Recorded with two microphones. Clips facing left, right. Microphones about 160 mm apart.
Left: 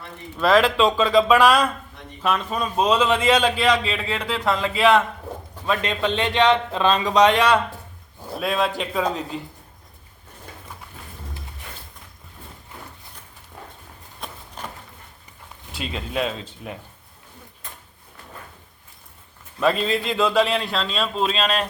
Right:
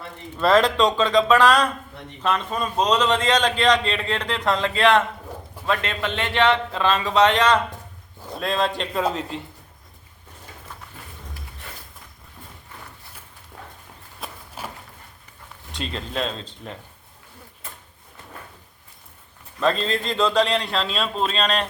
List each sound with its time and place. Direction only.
0.3 s a man's voice: centre (ahead or behind)
14.2 s walk: 5° right (ahead or behind)
15.7 s speech: 5° left (ahead or behind)
19.5 s a man's voice: 10° left (ahead or behind)